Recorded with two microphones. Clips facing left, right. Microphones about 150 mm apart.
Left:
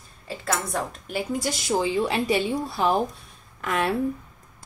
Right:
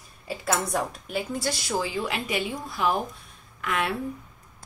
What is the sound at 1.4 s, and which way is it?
A woman's voice, 20° left (ahead or behind).